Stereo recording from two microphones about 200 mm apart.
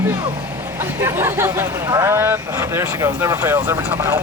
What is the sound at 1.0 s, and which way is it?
Speech, 10° right (ahead or behind).